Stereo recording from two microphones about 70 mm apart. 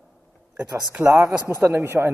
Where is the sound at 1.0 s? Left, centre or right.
Right.